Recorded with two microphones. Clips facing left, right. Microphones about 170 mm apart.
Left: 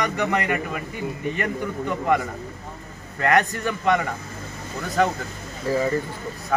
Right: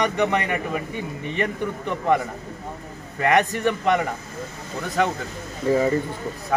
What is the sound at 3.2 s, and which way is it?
Speech, 15° right (ahead or behind).